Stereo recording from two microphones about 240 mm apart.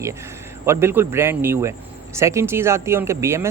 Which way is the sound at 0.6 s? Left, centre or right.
Centre.